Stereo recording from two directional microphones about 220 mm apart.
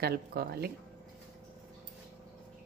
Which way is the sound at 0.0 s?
45° right (ahead or behind).